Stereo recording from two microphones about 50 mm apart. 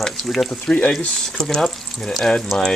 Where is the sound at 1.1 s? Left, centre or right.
Centre.